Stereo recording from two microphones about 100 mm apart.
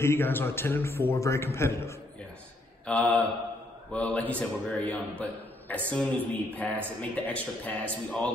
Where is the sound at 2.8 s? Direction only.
10° left (ahead or behind).